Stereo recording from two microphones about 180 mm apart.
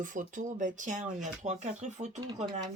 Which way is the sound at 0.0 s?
45° right (ahead or behind).